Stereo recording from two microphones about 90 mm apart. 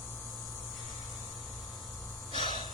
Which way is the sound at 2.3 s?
70° left (ahead or behind).